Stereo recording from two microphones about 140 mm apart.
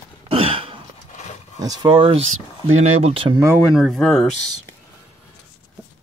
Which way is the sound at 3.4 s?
20° right (ahead or behind).